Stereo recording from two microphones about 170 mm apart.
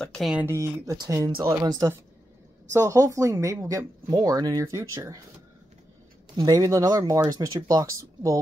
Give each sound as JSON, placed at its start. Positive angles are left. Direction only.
{"t": 0.0, "sound": "a sound", "side_deg": 0}
{"t": 0.5, "sound": "speech", "side_deg": -20}
{"t": 6.3, "sound": "speech", "side_deg": -20}